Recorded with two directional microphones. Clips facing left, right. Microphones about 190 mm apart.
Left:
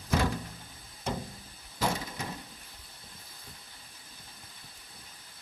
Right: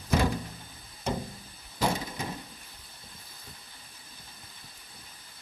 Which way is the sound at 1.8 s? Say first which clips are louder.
Right 2 dB; 20° right (ahead or behind).